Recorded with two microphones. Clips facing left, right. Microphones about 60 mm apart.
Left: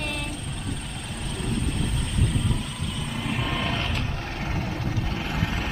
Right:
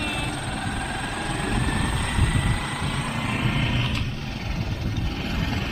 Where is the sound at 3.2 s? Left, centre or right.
Right.